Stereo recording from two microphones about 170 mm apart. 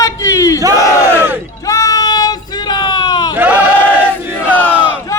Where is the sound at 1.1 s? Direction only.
10° right (ahead or behind).